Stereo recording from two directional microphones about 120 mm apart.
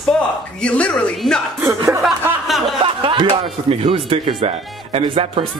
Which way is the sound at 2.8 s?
45° right (ahead or behind).